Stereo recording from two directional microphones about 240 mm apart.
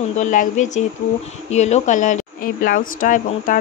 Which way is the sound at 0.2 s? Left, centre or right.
Left.